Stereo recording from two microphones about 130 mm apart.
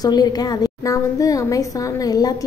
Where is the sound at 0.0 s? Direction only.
30° left (ahead or behind).